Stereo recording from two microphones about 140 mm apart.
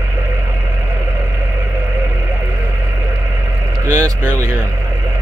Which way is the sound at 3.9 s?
25° right (ahead or behind).